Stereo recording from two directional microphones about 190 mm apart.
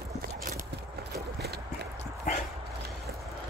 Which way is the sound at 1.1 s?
60° right (ahead or behind).